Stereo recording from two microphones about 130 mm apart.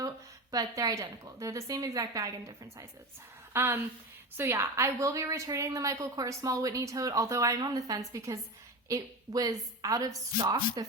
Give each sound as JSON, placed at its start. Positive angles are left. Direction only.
{"t": 0.5, "sound": "a woman's voice", "side_deg": -30}